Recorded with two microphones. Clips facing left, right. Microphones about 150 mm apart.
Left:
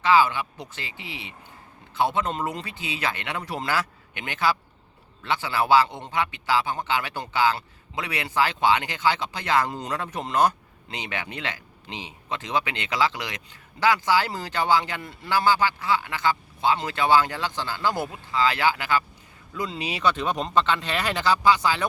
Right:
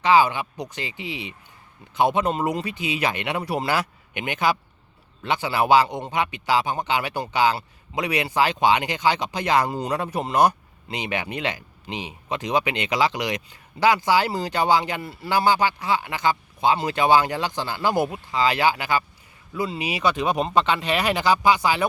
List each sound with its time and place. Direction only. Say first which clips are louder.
0.0 s a man's voice: right 2 dB; 15° right (ahead or behind)